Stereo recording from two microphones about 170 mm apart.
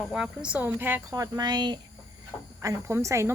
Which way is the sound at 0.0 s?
5° right (ahead or behind).